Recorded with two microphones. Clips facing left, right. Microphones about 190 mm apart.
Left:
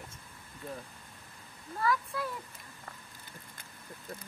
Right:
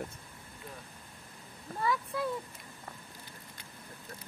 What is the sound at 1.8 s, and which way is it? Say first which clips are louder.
Speech: left 1 dB; 20° right (ahead or behind).